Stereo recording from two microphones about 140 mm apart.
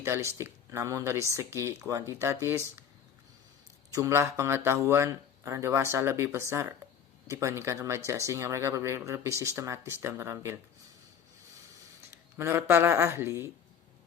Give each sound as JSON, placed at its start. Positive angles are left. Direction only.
{"t": 0.0, "sound": "speech", "side_deg": -20}
{"t": 3.9, "sound": "speech", "side_deg": -20}
{"t": 12.4, "sound": "speech", "side_deg": -20}